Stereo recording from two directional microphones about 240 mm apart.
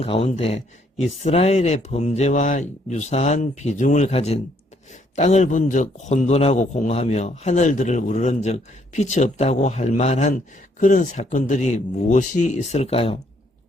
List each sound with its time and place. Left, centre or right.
0.0 s a man's voice: left